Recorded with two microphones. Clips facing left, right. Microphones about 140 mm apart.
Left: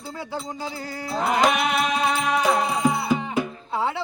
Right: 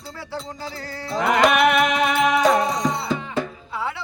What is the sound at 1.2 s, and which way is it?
Music, 70° right (ahead or behind).